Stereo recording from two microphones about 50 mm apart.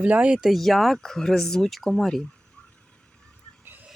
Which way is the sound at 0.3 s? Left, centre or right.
Centre.